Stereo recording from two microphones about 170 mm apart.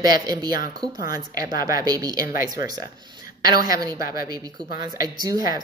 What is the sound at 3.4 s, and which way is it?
Speech, 25° right (ahead or behind).